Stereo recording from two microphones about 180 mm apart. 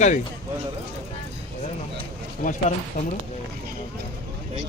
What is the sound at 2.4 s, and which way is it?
Speech, 45° left (ahead or behind).